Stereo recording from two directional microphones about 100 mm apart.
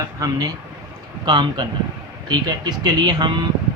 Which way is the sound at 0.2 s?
40° right (ahead or behind).